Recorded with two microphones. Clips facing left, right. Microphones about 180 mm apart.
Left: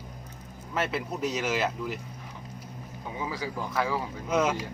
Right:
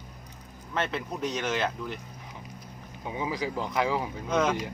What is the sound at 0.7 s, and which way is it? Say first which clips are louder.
Speech: left 1 dB; 5° left (ahead or behind).